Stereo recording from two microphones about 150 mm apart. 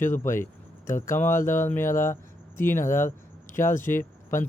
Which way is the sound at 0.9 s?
60° left (ahead or behind).